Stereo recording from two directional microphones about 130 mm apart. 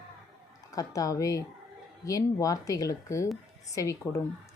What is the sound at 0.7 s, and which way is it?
A woman's voice, 25° left (ahead or behind).